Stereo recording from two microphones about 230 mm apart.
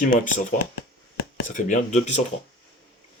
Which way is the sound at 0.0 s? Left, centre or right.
Left.